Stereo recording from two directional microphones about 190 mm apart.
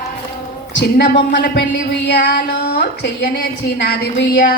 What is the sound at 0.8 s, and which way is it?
Speech, 65° left (ahead or behind).